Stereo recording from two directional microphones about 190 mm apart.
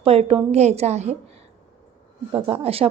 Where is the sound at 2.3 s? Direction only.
30° right (ahead or behind).